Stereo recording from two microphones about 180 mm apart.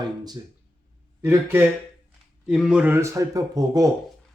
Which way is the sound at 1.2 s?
15° right (ahead or behind).